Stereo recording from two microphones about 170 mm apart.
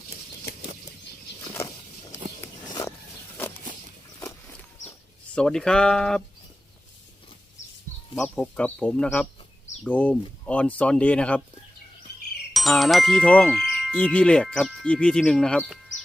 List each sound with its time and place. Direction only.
2.6 s a sound: 20° left (ahead or behind)
5.3 s ding: 5° left (ahead or behind)
8.2 s speech: 10° left (ahead or behind)
12.1 s music: 70° left (ahead or behind)
12.5 s ding: centre (ahead or behind)